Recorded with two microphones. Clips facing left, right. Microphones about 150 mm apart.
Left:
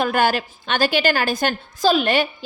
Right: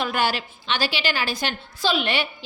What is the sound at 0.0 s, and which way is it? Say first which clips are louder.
A woman's voice: left 5 dB; 50° left (ahead or behind).